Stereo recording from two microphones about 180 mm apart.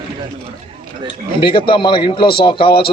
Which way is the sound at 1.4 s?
30° left (ahead or behind).